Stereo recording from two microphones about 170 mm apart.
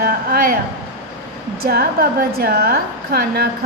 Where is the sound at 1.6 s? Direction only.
60° right (ahead or behind).